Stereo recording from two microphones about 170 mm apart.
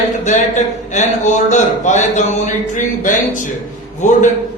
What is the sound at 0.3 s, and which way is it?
Speech, 45° left (ahead or behind).